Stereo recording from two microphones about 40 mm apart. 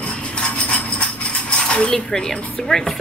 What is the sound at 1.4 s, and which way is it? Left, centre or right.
Coin, left.